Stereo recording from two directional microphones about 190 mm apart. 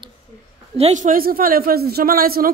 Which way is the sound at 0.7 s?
35° right (ahead or behind).